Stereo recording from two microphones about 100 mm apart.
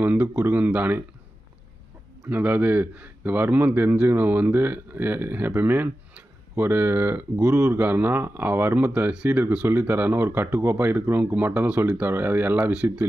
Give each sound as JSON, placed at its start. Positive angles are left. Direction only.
{"t": 0.0, "sound": "a man's voice", "side_deg": -15}
{"t": 2.2, "sound": "a man's voice", "side_deg": -15}